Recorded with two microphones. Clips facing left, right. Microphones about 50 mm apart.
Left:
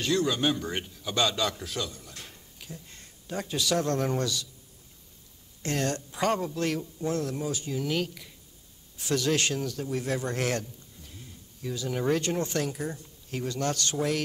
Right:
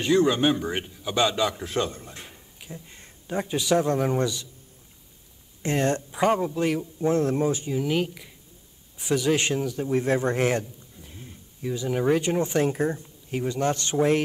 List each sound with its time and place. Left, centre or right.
0.0 s a man's voice: right
1.7 s speech: right
2.2 s speech: centre
5.6 s a man's voice: right
7.0 s a man's voice: right
7.6 s a man's voice: centre
12.6 s speech: right
13.0 s a man's voice: centre